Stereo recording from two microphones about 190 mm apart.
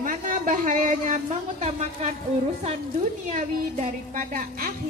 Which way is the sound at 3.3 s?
40° right (ahead or behind).